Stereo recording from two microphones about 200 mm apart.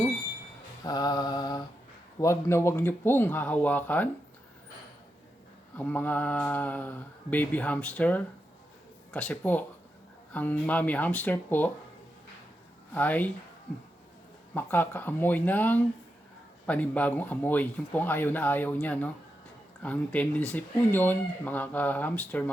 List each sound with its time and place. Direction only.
0.9 s mantra: 20° left (ahead or behind)
2.2 s speech: 15° left (ahead or behind)
5.7 s speech: 10° left (ahead or behind)
12.9 s speech: 10° left (ahead or behind)
14.5 s speech: 10° left (ahead or behind)